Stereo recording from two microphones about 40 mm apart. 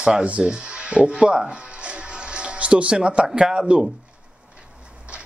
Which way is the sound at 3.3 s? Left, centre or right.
Centre.